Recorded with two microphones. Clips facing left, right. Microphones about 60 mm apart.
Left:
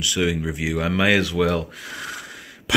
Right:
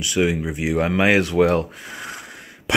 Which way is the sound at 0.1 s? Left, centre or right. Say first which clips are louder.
Right 4 dB; right.